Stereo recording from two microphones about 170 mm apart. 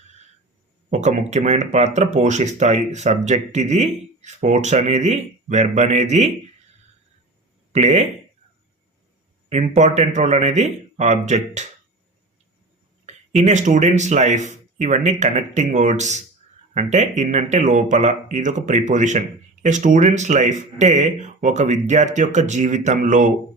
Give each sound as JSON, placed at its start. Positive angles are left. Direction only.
{"t": 0.9, "sound": "speech", "side_deg": -40}
{"t": 7.7, "sound": "speech", "side_deg": -45}
{"t": 9.5, "sound": "speech", "side_deg": -45}
{"t": 13.4, "sound": "speech", "side_deg": -45}